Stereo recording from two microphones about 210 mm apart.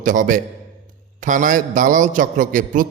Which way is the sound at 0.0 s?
40° right (ahead or behind).